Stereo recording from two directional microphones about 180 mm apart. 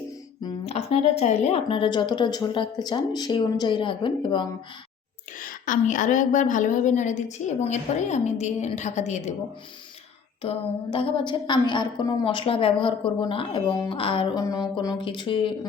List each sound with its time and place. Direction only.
0.4 s a sound: 35° left (ahead or behind)
1.2 s a woman's voice: 35° left (ahead or behind)
5.4 s a woman's voice: 50° left (ahead or behind)
10.4 s a woman's voice: 30° left (ahead or behind)